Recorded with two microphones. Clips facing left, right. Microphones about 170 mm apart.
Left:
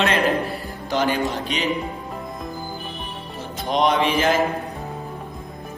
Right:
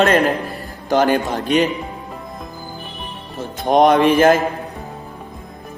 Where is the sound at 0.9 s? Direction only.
45° right (ahead or behind).